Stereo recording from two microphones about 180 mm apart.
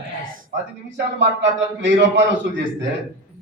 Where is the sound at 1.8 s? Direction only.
85° right.